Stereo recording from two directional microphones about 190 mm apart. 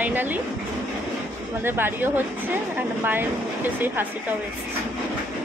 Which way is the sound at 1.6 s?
10° right (ahead or behind).